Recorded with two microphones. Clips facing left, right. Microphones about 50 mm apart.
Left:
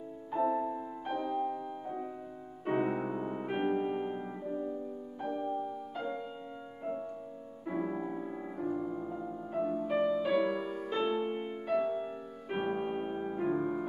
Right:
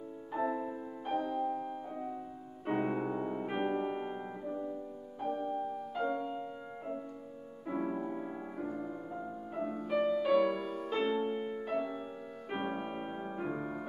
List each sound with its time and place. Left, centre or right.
0.3 s music: centre
7.6 s music: centre
11.2 s music: left
12.0 s music: centre